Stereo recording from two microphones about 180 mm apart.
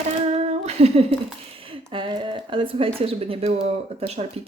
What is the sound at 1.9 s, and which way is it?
Speech, 25° right (ahead or behind).